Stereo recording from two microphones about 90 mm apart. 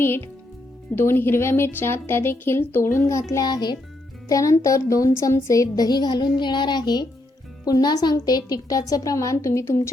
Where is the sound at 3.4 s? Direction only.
50° left (ahead or behind).